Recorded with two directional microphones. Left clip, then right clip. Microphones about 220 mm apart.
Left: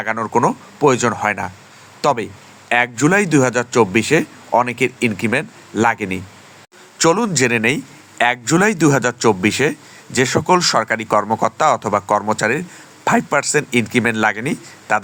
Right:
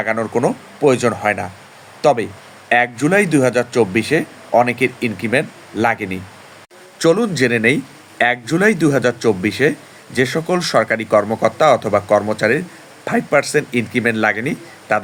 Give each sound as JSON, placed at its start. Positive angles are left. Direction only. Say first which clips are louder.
{"t": 0.0, "sound": "speech", "louder": "left 1 dB", "side_deg": 45}